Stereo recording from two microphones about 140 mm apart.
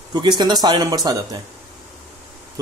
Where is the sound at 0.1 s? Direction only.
30° right (ahead or behind).